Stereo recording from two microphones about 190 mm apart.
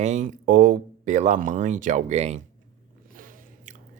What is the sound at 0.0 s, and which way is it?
Speech, 40° right (ahead or behind).